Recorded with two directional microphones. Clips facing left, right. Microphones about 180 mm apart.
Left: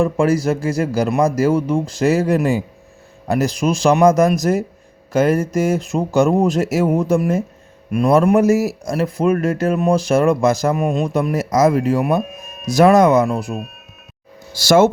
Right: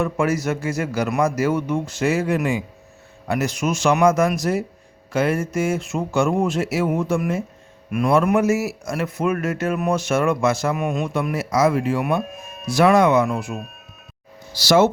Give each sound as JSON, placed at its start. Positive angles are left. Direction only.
{"t": 0.0, "sound": "speech", "side_deg": 30}
{"t": 14.5, "sound": "speech", "side_deg": 50}